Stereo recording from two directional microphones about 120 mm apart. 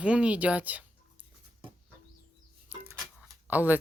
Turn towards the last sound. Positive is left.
turn(degrees=-15)  # may be behind; listen again after turning